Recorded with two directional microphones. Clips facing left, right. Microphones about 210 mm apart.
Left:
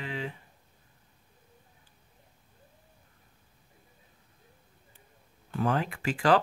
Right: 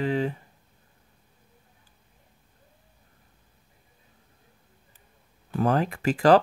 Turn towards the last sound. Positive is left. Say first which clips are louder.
# right 6 dB
turn(degrees=-40)  # may be behind; listen again after turning